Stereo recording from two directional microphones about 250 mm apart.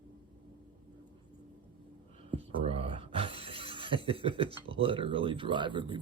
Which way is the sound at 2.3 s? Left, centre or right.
Right.